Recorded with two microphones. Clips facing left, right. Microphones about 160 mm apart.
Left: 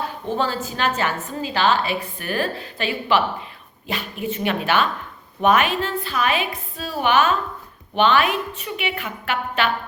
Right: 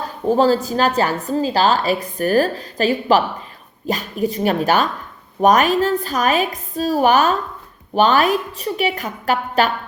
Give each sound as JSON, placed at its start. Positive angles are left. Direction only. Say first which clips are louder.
{"t": 0.0, "sound": "a woman's voice", "louder": "right 8 dB", "side_deg": -40}